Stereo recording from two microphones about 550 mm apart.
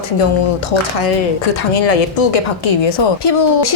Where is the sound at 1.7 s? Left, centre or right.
Left.